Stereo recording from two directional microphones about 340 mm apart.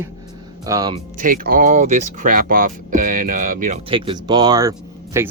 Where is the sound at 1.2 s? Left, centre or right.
Right.